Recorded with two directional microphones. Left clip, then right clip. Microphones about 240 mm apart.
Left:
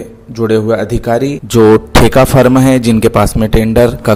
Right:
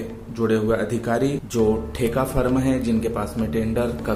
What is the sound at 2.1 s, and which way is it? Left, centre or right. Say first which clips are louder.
A man's voice: left 13 dB; left.